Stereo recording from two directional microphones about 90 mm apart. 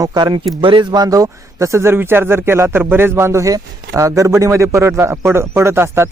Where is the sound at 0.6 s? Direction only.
65° right (ahead or behind).